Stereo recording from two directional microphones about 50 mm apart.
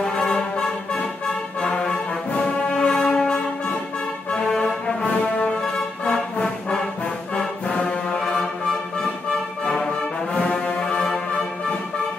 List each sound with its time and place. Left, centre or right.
0.1 s music: centre
2.3 s brass instrument: left
3.0 s music: centre
7.3 s brass instrument: centre
8.2 s music: centre
9.7 s music: centre